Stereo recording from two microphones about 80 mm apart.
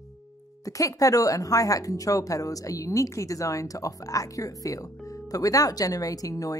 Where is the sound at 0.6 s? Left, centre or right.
Left.